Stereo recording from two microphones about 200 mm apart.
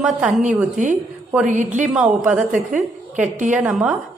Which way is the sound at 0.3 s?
35° right (ahead or behind).